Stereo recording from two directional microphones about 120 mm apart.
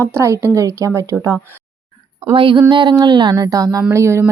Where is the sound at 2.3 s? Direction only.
45° right (ahead or behind); by 4.2 s 25° right (ahead or behind).